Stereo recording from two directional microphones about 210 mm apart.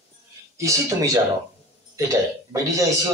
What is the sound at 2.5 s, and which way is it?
Speech, 15° right (ahead or behind).